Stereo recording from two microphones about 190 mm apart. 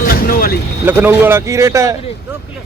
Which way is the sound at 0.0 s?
50° left (ahead or behind).